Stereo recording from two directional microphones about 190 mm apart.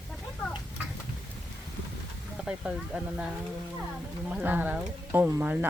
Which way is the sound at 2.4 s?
Centre (ahead or behind).